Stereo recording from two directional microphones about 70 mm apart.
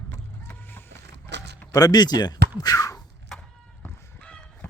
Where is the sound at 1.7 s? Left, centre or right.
Left.